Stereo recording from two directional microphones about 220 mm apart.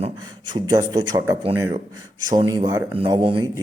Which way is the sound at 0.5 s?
20° right (ahead or behind).